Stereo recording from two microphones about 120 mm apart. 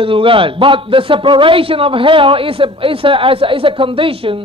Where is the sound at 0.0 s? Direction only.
45° right (ahead or behind).